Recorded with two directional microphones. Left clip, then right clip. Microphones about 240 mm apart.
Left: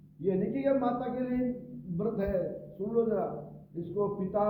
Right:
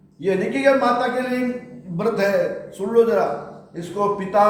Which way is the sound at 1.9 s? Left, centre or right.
Centre.